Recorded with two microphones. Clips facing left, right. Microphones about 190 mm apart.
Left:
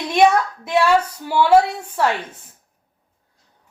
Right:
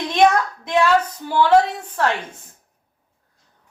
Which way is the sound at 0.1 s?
10° left (ahead or behind).